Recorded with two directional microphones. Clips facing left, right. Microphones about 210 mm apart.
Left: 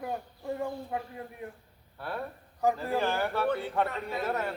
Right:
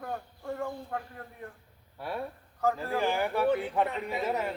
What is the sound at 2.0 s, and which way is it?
Speech, 10° right (ahead or behind).